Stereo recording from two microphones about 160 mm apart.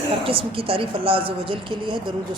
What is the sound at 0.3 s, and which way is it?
Speech, 35° right (ahead or behind).